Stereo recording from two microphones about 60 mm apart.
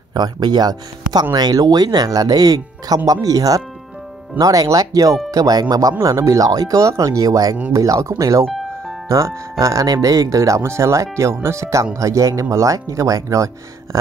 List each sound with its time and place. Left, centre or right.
1.3 s speech: right
6.0 s speech: right
6.9 s speech: right
7.7 s speech: right